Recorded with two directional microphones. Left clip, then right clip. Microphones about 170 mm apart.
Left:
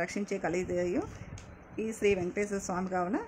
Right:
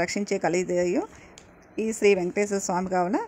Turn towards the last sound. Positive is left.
turn(degrees=-30)  # may be behind; listen again after turning